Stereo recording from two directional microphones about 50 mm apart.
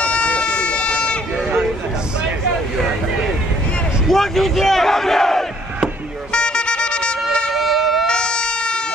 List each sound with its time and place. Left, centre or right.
0.0 s run: left
4.1 s speech: centre
6.3 s music: centre
7.5 s siren: centre
8.1 s emergency vehicle: centre